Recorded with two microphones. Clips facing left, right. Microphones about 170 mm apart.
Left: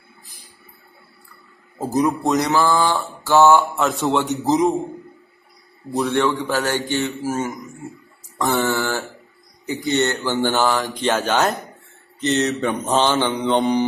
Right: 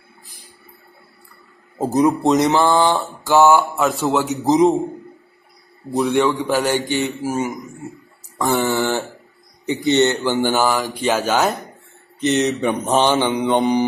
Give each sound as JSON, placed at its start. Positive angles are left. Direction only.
{"t": 1.8, "sound": "mantra", "side_deg": -20}
{"t": 3.7, "sound": "speech", "side_deg": 0}
{"t": 4.4, "sound": "mantra", "side_deg": -20}
{"t": 5.9, "sound": "mantra", "side_deg": -20}
{"t": 8.4, "sound": "speech", "side_deg": -15}
{"t": 9.8, "sound": "mantra", "side_deg": -20}
{"t": 10.8, "sound": "speech", "side_deg": -5}
{"t": 12.2, "sound": "mantra", "side_deg": -15}